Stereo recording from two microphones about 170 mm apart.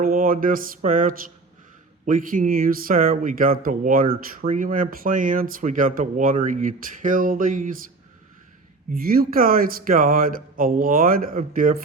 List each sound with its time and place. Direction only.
0.0 s a sound: 55° right (ahead or behind)
2.0 s speech: 50° right (ahead or behind)
8.9 s speech: 60° right (ahead or behind)